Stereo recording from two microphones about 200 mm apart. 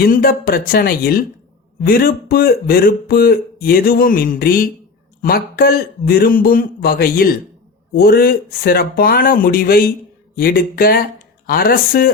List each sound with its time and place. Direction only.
0.0 s speech: 45° left (ahead or behind)